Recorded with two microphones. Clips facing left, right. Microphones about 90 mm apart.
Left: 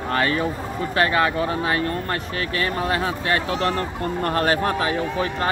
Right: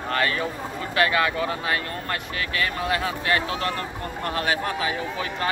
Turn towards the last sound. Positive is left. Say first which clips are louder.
# left 5 dB
turn(degrees=40)  # may be behind; listen again after turning